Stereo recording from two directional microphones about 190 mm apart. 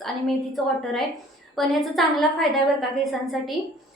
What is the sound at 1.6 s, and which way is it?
A woman's voice, centre (ahead or behind).